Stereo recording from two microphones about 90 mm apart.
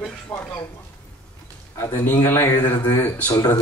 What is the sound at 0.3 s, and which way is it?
Speech, 30° left (ahead or behind).